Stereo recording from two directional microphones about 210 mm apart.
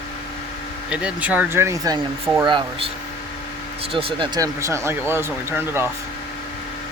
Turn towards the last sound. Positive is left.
turn(degrees=-10)  # may be behind; listen again after turning